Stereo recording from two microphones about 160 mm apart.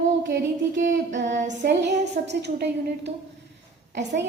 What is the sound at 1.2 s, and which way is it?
Female singing, 50° right (ahead or behind).